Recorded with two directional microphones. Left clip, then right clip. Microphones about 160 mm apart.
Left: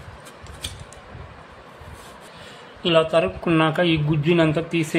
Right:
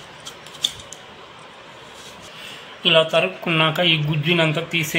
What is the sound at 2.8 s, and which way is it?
Speech, 25° left (ahead or behind).